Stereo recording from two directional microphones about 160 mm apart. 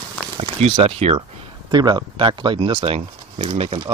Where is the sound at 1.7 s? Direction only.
25° right (ahead or behind).